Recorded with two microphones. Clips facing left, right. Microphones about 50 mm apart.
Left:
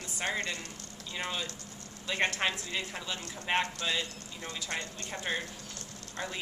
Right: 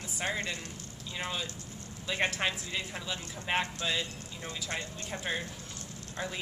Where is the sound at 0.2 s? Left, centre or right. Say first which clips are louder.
Even; centre.